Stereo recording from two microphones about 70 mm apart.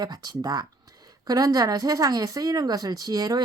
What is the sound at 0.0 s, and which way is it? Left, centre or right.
Speech, right.